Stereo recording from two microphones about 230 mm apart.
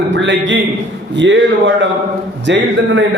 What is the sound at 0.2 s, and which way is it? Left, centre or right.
A man's voice, right.